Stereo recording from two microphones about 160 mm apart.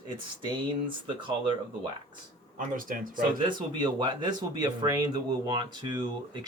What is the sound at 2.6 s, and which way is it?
Speech, 55° right (ahead or behind).